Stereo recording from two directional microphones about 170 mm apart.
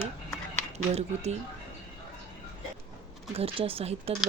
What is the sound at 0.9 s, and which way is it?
Speech, 40° right (ahead or behind).